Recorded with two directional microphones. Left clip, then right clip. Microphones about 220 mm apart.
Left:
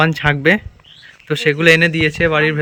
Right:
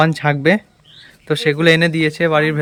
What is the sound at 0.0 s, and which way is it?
Speech, 15° right (ahead or behind).